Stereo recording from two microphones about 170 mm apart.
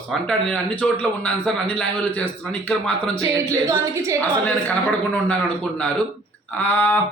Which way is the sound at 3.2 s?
20° right (ahead or behind).